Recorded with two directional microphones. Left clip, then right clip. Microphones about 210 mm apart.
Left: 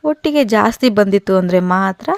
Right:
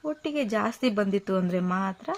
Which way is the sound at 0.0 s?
45° left (ahead or behind).